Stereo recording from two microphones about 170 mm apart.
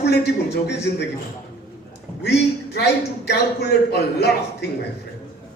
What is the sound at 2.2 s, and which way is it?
A man's voice, 75° left (ahead or behind).